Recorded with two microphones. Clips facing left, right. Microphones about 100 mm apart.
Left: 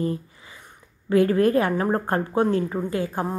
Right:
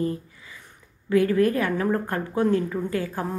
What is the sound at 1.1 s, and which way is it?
A woman's voice, 30° left (ahead or behind).